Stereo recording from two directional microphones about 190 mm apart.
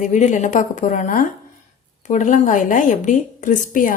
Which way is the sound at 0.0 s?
40° left (ahead or behind).